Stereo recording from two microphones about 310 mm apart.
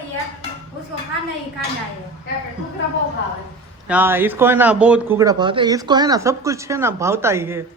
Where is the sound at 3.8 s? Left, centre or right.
Centre.